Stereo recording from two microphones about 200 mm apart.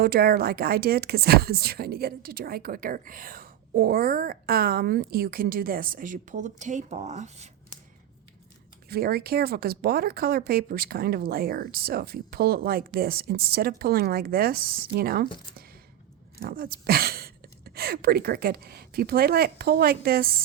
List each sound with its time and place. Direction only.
0.0 s speech: 50° right (ahead or behind)
8.9 s speech: 50° right (ahead or behind)
16.4 s a sound: 45° right (ahead or behind)
17.7 s speech: 50° right (ahead or behind)